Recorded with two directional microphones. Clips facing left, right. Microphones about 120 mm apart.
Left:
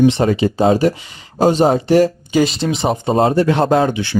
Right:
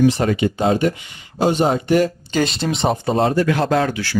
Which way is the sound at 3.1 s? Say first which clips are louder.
Left 5 dB; 35° left (ahead or behind).